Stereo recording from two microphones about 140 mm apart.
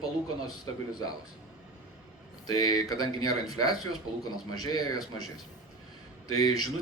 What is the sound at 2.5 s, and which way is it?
Speech, 30° left (ahead or behind).